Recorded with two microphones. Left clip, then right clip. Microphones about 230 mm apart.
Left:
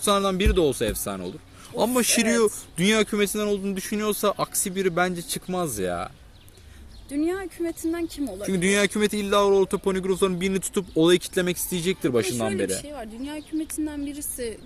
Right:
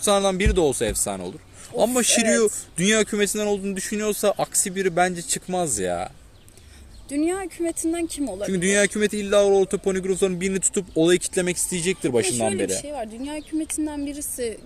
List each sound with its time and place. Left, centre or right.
0.0 s speech: centre
7.1 s speech: right
8.4 s speech: centre
12.4 s speech: centre